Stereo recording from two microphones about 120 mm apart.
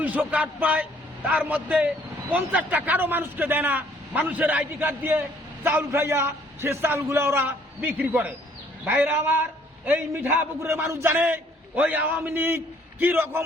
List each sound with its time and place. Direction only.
0.0 s a man's voice: 15° right (ahead or behind)